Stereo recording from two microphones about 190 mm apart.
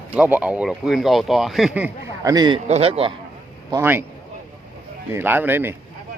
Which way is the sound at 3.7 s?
10° right (ahead or behind).